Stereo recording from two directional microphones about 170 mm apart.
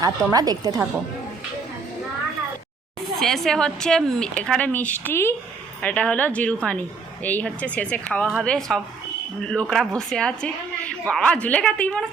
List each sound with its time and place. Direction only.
0.0 s a woman's voice: 20° right (ahead or behind)
3.2 s a woman's voice: centre (ahead or behind)